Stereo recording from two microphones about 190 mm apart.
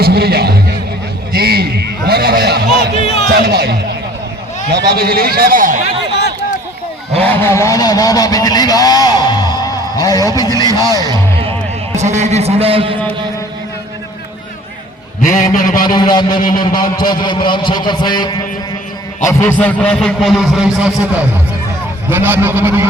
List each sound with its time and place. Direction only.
0.0 s music: 55° right (ahead or behind)
1.3 s a sound: 55° right (ahead or behind)
3.0 s a sound: 35° left (ahead or behind)
3.4 s a man's voice: 55° right (ahead or behind)
7.2 s speech: 15° left (ahead or behind)
10.7 s speech: 20° right (ahead or behind)
11.9 s a man's voice: 35° right (ahead or behind)
15.5 s a sound: 45° left (ahead or behind)
15.8 s a man's voice: 20° left (ahead or behind)
19.2 s a man's voice: 10° left (ahead or behind); by 22.9 s 10° right (ahead or behind)